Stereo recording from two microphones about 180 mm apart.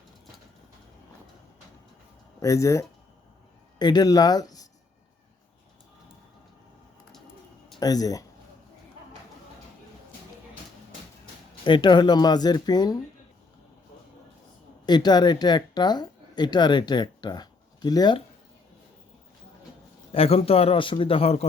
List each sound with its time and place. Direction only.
2.4 s speech: 15° left (ahead or behind)
7.8 s speech: 20° left (ahead or behind)
11.6 s speech: 25° left (ahead or behind)
14.8 s speech: 25° left (ahead or behind)
20.1 s speech: 35° left (ahead or behind)